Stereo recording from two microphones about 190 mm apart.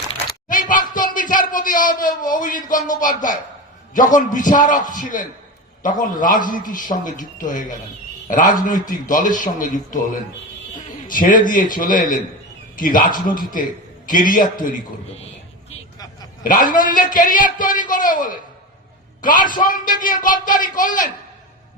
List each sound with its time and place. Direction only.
0.3 s a sound: 45° left (ahead or behind)
3.9 s a man's voice: 45° left (ahead or behind)
16.4 s a man's voice: 45° left (ahead or behind)